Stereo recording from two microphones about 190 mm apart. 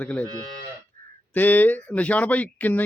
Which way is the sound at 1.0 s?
50° right (ahead or behind).